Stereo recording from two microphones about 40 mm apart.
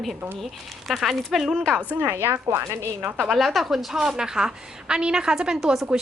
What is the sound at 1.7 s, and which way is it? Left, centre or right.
Speech, right.